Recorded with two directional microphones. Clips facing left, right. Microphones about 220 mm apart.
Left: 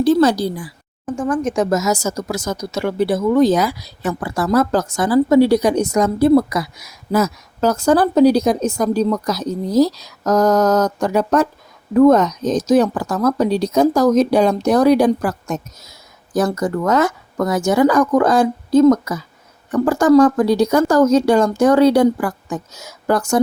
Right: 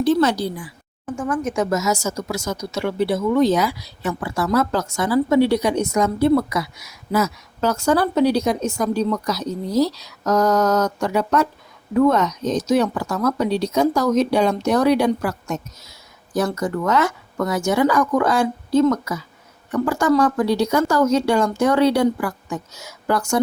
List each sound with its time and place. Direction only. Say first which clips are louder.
0.0 s a woman's voice: left 4 dB; 35° left (ahead or behind)